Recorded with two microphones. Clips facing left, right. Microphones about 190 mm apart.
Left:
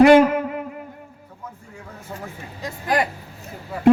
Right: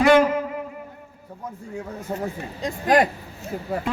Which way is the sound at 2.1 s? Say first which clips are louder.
Right 7 dB; 45° right (ahead or behind).